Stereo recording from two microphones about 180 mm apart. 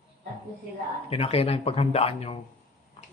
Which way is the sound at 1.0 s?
35° left (ahead or behind).